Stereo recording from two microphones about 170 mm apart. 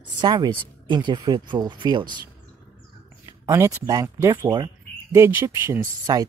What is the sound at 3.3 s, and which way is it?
Speech, 20° right (ahead or behind).